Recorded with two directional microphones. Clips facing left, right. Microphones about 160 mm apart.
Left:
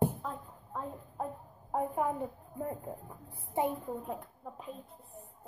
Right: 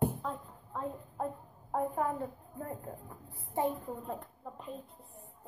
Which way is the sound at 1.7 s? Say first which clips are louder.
Left 1 dB; 15° left (ahead or behind).